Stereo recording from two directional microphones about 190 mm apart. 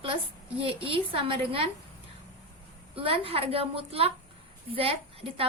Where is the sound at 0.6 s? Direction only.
30° right (ahead or behind).